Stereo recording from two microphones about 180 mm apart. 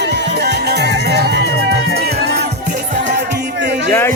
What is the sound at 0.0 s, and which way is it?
Music, 70° right (ahead or behind).